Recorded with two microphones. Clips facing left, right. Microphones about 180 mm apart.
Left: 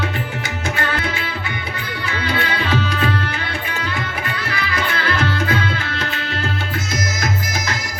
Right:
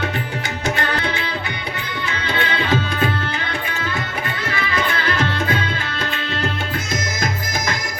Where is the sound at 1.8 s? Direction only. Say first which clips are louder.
Left 1 dB; 20° right (ahead or behind).